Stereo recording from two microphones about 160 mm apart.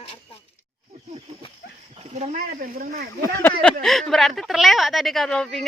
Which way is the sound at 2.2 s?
60° right (ahead or behind).